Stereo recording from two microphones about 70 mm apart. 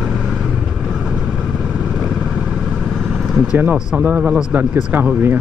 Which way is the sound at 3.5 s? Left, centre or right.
Right.